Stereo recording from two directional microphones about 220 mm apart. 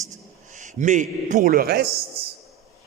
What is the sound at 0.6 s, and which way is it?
A man's voice, 35° right (ahead or behind).